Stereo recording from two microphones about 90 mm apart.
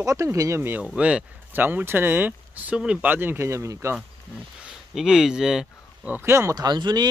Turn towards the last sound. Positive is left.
turn(degrees=-50)  # may be behind; listen again after turning